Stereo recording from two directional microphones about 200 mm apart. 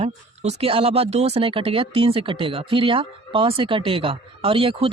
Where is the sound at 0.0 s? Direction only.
30° right (ahead or behind).